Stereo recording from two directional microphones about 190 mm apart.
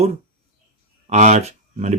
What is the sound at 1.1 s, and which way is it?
Speech, 35° right (ahead or behind).